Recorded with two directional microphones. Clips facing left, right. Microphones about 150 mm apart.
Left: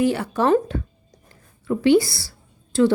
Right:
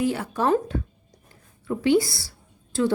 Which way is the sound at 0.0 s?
75° left (ahead or behind).